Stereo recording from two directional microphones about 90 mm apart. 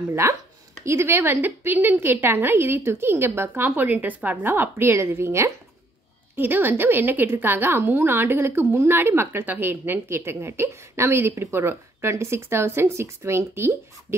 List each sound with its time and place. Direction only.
0.1 s a woman's voice: 30° right (ahead or behind)